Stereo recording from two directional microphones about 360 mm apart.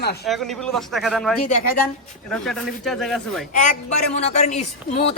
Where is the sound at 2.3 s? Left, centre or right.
Centre.